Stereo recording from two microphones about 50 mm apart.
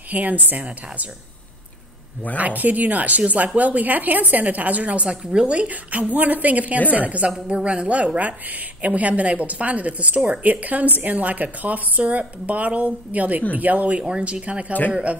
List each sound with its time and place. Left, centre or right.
0.1 s speech: right
2.3 s a woman's voice: right